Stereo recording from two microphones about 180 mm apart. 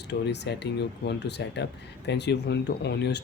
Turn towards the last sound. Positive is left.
turn(degrees=70)  # may be behind; listen again after turning